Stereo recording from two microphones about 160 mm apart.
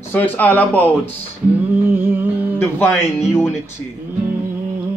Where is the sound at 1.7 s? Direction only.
10° right (ahead or behind).